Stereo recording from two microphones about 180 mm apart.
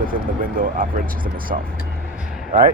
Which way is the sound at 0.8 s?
50° right (ahead or behind).